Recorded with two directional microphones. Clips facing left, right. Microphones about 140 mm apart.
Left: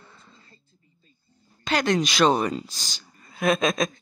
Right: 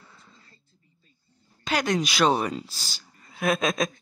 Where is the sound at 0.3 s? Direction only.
20° left (ahead or behind).